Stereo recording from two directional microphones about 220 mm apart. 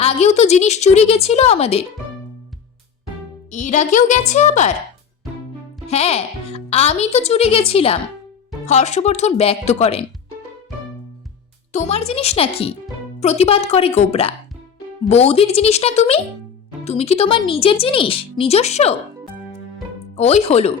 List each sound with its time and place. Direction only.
0.0 s speech: 30° left (ahead or behind)
3.5 s a woman's voice: 35° left (ahead or behind)
5.9 s speech: 30° left (ahead or behind)
11.7 s speech: 30° left (ahead or behind)
20.1 s speech: 30° left (ahead or behind)